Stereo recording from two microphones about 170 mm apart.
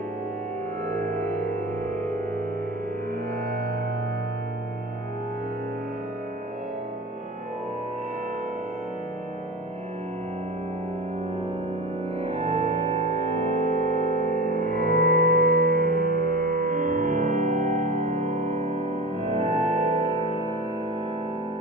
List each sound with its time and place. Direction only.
1.0 s music: 55° right (ahead or behind)
1.4 s music: 10° left (ahead or behind)
12.2 s music: 30° right (ahead or behind)
14.4 s music: 60° right (ahead or behind); by 20.1 s 35° right (ahead or behind)